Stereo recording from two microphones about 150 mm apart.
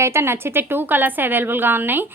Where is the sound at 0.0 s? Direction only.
15° right (ahead or behind).